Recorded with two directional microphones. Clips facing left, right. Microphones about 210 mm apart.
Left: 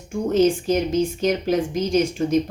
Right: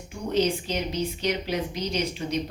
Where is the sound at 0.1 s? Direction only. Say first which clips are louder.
Left 7 dB; 45° left (ahead or behind).